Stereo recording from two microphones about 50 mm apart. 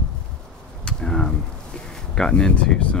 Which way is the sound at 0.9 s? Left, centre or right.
Centre.